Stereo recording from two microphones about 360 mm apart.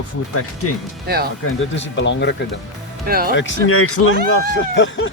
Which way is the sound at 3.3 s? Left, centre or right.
Left.